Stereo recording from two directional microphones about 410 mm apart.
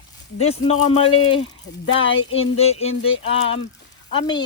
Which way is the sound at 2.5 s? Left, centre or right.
Centre.